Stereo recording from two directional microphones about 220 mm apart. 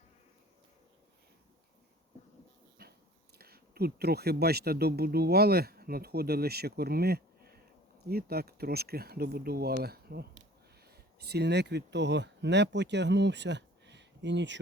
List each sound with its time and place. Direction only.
3.3 s speech: 45° right (ahead or behind)